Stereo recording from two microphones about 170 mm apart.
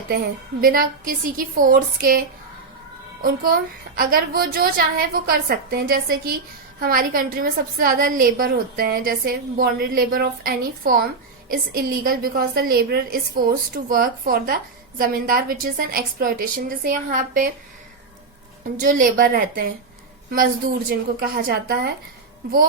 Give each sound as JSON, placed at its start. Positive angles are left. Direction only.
{"t": 0.6, "sound": "a woman's voice", "side_deg": -60}
{"t": 18.8, "sound": "a woman's voice", "side_deg": -55}
{"t": 21.2, "sound": "a woman's voice", "side_deg": -60}